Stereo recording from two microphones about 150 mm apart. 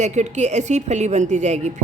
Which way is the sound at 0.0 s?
50° right (ahead or behind).